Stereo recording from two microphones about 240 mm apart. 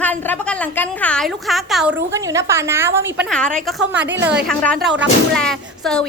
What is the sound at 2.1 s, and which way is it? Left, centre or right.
Speech, centre.